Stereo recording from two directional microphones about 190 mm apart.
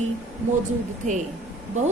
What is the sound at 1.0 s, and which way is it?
Speech, 40° right (ahead or behind).